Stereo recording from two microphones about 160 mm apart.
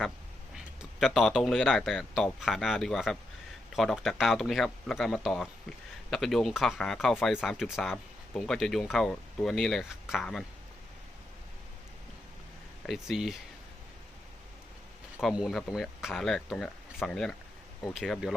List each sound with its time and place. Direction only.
0.8 s speech: centre (ahead or behind)
12.8 s speech: centre (ahead or behind)
15.2 s speech: 5° right (ahead or behind)